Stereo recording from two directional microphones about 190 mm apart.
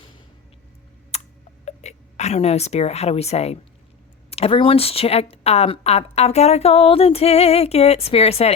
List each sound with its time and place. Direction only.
1.1 s tick: 35° left (ahead or behind)
1.6 s speech: 35° left (ahead or behind)